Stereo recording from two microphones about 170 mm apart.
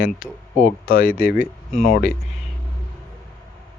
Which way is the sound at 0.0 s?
60° left (ahead or behind).